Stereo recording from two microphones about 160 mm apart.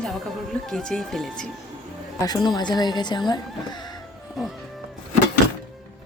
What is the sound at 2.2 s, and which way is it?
Speech, 25° left (ahead or behind).